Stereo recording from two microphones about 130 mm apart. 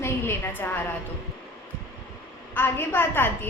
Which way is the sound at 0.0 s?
20° left (ahead or behind).